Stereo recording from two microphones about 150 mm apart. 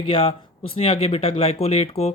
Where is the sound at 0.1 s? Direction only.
40° left (ahead or behind).